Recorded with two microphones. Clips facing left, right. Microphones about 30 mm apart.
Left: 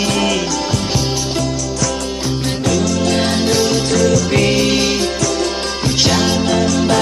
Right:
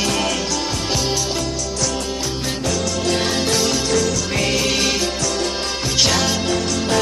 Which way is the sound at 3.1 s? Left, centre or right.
Centre.